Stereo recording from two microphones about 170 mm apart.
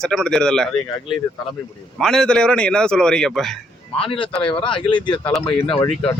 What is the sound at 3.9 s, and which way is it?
Speech, 30° left (ahead or behind).